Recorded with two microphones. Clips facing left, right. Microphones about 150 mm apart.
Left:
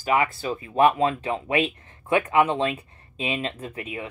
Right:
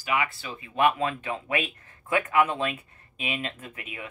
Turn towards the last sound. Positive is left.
turn(degrees=25)  # may be behind; listen again after turning